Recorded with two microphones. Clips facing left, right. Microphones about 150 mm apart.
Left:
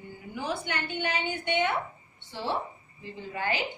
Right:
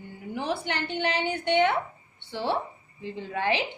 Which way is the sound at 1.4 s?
75° right (ahead or behind).